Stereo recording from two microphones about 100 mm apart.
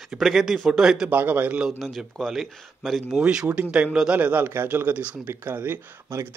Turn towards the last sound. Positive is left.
turn(degrees=-25)  # may be behind; listen again after turning